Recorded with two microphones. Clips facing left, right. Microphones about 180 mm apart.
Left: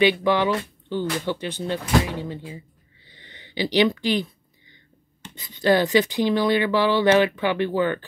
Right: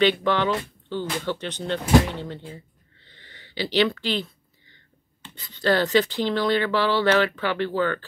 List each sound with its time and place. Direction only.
0.0 s speech: 10° left (ahead or behind)
3.1 s a sound: 15° left (ahead or behind)
5.3 s speech: 15° left (ahead or behind)